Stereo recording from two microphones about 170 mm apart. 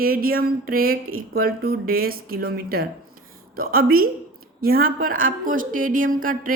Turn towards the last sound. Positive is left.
turn(degrees=-55)  # may be behind; listen again after turning